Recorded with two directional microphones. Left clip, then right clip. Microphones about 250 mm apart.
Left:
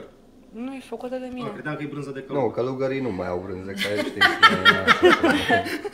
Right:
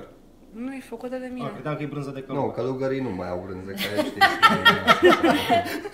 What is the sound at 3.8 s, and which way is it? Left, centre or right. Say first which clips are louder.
Speech: even; right.